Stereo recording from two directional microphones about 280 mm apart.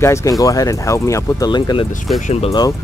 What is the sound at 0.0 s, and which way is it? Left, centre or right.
Speech, centre.